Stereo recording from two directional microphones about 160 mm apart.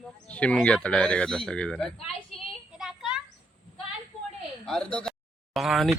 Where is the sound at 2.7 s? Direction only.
Centre (ahead or behind).